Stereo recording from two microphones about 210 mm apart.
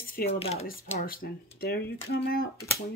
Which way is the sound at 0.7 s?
45° left (ahead or behind).